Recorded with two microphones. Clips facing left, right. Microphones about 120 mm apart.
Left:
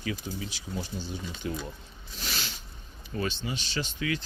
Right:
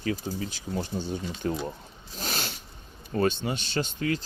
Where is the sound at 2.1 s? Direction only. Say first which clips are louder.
Right 4 dB; 45° right (ahead or behind).